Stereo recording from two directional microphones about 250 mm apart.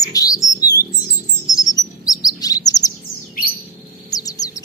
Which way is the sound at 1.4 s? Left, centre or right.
Centre.